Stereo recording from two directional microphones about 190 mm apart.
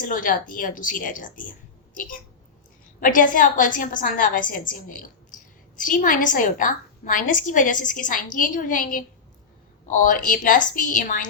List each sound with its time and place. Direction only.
0.0 s a woman's voice: 45° left (ahead or behind)